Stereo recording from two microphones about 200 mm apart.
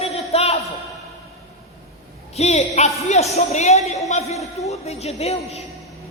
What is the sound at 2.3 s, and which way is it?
Speech, 30° left (ahead or behind).